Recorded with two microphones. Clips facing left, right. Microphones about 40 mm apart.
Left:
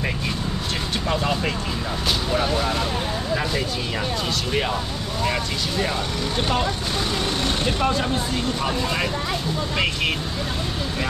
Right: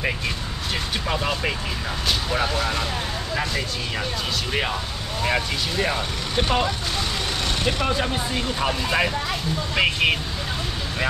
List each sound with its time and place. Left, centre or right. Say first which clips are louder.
1.0 s speech: left 2 dB; centre
4.5 s speech: left 2 dB; centre
7.6 s speech: even; centre